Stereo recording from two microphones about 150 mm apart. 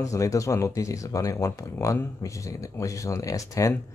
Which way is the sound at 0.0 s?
20° left (ahead or behind).